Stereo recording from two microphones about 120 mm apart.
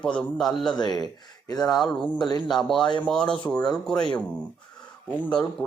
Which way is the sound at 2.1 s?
35° left (ahead or behind).